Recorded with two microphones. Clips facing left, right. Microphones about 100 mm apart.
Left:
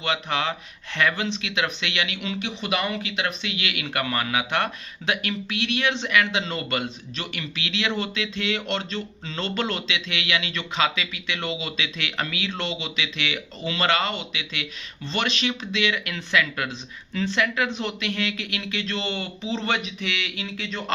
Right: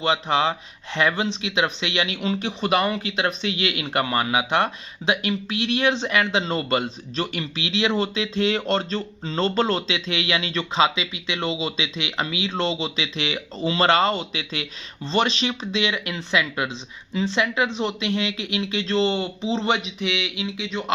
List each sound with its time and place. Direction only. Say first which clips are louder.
0.0 s speech: right 5 dB; 30° right (ahead or behind)